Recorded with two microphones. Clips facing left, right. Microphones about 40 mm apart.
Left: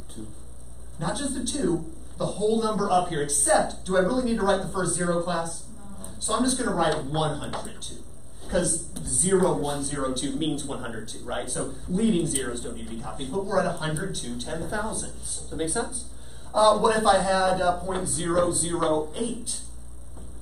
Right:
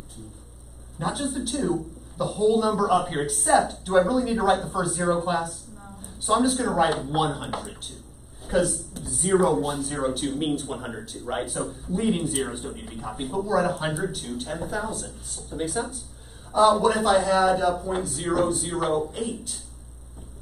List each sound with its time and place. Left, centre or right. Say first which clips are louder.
0.9 s a man's voice: right 2 dB; centre